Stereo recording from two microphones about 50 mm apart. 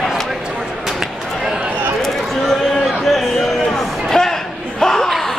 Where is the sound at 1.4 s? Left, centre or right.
Centre.